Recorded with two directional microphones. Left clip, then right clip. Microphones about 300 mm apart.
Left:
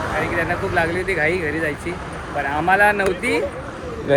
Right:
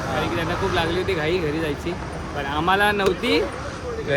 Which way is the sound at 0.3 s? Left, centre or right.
Centre.